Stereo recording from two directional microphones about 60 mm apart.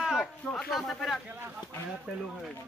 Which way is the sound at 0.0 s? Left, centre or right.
Centre.